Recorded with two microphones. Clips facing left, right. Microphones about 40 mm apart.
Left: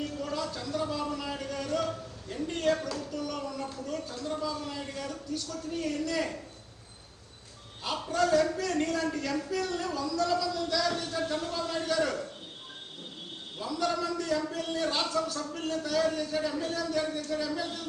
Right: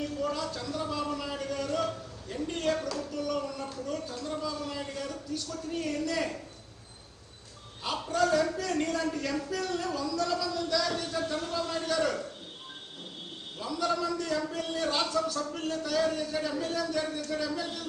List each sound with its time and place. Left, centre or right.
0.2 s a sound: centre
3.1 s a man's voice: centre
8.0 s a man's voice: centre
11.3 s speech: left
11.7 s a man's voice: centre
13.6 s a man's voice: centre